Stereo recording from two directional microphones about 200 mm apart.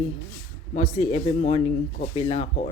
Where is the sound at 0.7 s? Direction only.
35° left (ahead or behind).